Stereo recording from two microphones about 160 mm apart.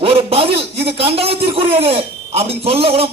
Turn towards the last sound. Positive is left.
turn(degrees=-35)  # may be behind; listen again after turning